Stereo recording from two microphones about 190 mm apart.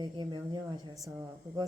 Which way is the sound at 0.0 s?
25° right (ahead or behind).